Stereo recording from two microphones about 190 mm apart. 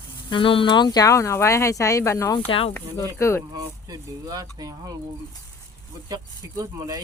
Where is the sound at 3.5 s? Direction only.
20° right (ahead or behind).